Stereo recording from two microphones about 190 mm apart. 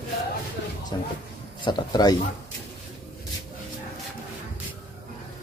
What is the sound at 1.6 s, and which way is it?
Speech, 25° left (ahead or behind).